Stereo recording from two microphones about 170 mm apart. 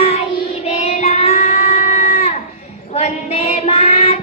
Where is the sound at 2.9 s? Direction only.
40° left (ahead or behind).